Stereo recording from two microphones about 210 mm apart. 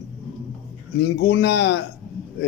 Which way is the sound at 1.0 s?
60° left (ahead or behind).